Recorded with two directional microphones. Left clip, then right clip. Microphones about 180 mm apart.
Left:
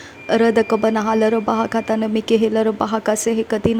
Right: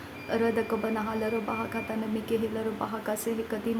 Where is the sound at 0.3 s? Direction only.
45° left (ahead or behind).